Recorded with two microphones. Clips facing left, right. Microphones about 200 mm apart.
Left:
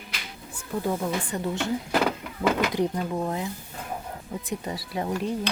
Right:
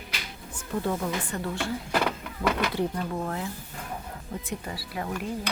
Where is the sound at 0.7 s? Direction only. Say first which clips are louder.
Left 1 dB; 10° left (ahead or behind).